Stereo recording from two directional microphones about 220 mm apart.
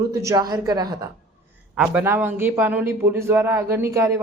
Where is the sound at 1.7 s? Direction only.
5° right (ahead or behind).